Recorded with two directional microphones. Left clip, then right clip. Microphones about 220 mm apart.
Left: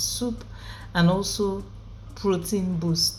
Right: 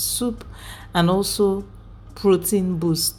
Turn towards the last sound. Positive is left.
turn(degrees=-35)  # may be behind; listen again after turning